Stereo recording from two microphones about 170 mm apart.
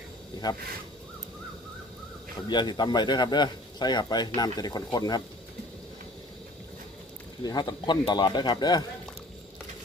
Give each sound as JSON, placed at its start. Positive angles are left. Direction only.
{"t": 2.5, "sound": "a man's voice", "side_deg": 25}
{"t": 7.4, "sound": "a man's voice", "side_deg": 25}